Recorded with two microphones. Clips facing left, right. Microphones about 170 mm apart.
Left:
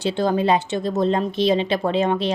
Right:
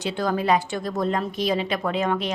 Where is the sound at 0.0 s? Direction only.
30° left (ahead or behind).